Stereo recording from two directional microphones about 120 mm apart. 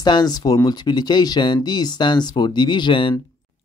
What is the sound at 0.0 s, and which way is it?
Speech, 35° left (ahead or behind).